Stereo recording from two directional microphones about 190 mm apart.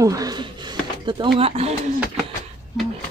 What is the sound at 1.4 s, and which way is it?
Speech, 30° right (ahead or behind).